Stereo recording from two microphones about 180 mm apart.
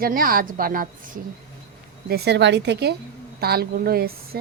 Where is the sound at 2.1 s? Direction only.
70° right (ahead or behind).